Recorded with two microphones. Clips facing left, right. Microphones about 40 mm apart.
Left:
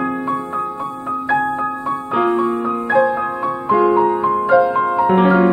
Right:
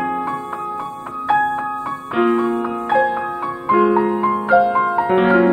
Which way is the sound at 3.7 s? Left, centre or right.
Right.